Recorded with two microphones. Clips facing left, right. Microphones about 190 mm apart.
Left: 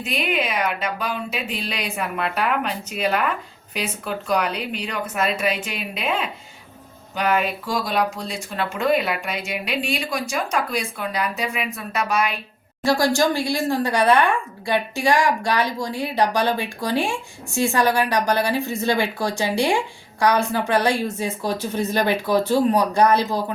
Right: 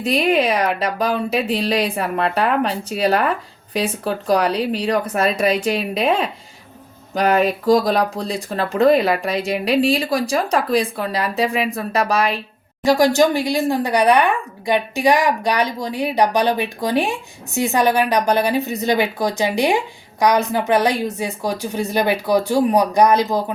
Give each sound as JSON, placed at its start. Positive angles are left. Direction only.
{"t": 0.0, "sound": "speech", "side_deg": -35}
{"t": 12.8, "sound": "speech", "side_deg": -20}